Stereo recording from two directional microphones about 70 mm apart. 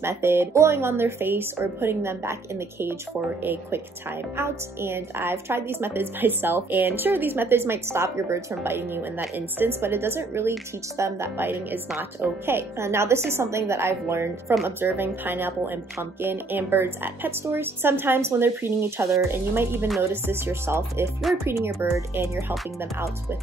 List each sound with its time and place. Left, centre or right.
0.0 s a woman's voice: right
4.4 s a woman's voice: right